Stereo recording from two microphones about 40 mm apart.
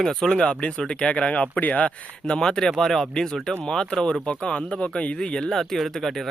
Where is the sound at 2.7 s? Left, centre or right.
Centre.